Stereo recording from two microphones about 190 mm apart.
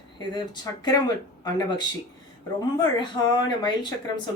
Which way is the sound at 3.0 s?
25° left (ahead or behind).